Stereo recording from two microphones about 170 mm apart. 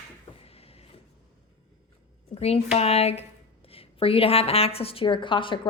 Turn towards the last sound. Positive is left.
turn(degrees=30)  # may be behind; listen again after turning